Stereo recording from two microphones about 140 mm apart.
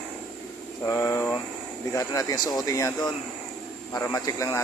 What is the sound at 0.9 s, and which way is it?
Speech, 20° left (ahead or behind).